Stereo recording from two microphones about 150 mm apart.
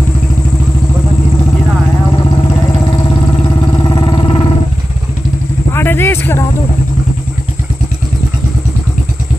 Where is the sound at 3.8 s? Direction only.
30° left (ahead or behind).